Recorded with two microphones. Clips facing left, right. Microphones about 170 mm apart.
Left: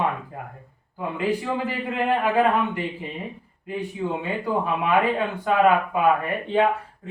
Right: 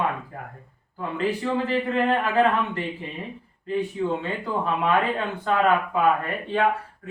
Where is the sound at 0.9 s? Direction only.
15° left (ahead or behind).